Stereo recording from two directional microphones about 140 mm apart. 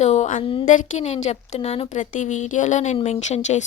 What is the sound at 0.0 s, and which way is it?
A woman's voice, 55° left (ahead or behind).